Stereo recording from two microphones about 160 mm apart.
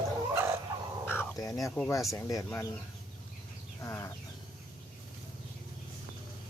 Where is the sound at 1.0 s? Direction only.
15° left (ahead or behind).